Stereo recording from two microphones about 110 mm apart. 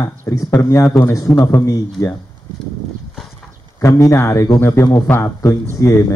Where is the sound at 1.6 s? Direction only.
30° left (ahead or behind).